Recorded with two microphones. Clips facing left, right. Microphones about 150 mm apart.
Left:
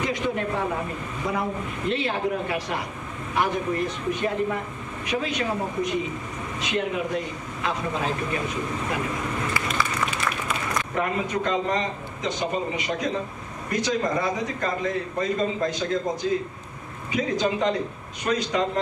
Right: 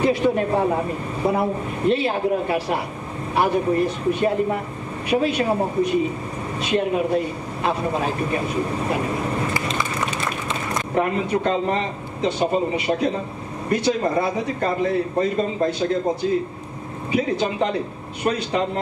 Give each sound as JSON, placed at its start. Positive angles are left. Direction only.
{"t": 0.0, "sound": "speech", "side_deg": -30}
{"t": 8.8, "sound": "a man's voice", "side_deg": -30}
{"t": 17.1, "sound": "speech", "side_deg": -30}